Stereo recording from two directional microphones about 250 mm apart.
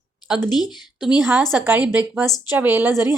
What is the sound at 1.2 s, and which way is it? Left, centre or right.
A woman's voice, centre.